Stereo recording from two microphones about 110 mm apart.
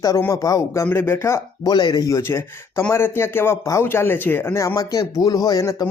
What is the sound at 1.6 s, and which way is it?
Speech, 40° left (ahead or behind).